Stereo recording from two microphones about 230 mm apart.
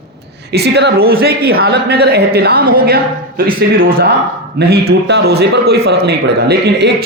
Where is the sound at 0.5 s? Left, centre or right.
Right.